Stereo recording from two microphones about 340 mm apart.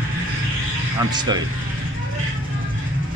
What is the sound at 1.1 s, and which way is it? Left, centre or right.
Speech, centre.